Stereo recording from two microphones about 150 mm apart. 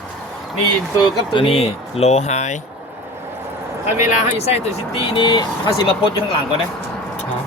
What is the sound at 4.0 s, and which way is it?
Speech, 45° left (ahead or behind).